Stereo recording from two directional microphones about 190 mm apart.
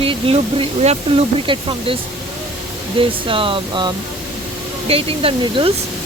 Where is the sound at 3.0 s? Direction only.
30° right (ahead or behind).